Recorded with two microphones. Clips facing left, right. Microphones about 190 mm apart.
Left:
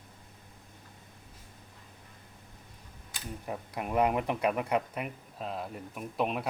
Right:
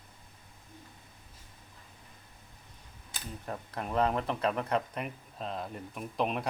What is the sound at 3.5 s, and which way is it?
Speech, 10° left (ahead or behind).